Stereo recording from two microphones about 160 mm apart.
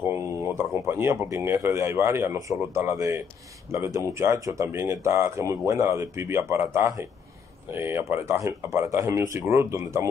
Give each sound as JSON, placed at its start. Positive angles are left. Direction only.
{"t": 0.0, "sound": "speech", "side_deg": -15}